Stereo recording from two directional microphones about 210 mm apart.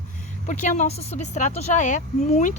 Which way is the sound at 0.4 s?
35° left (ahead or behind).